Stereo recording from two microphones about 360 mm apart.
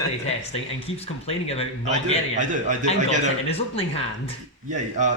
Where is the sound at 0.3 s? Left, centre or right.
Centre.